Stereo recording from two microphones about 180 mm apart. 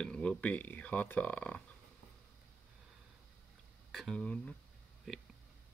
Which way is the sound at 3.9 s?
Centre (ahead or behind).